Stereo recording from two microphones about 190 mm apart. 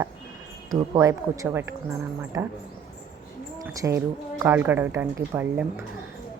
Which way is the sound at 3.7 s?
15° right (ahead or behind).